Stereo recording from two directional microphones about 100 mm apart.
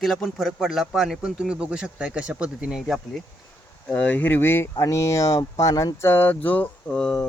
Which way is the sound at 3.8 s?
15° left (ahead or behind).